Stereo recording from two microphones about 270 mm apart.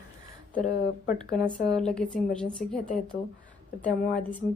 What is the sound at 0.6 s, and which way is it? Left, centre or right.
Speech, left.